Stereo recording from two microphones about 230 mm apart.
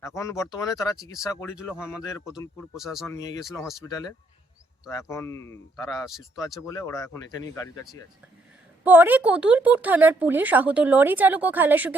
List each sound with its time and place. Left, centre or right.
0.0 s speech: centre
1.5 s speech: centre
3.1 s speech: centre
6.1 s speech: centre
6.6 s speech: centre
8.8 s speech: centre